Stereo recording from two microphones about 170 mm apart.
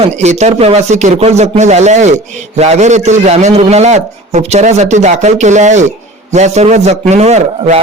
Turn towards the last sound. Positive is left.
turn(degrees=-40)  # may be behind; listen again after turning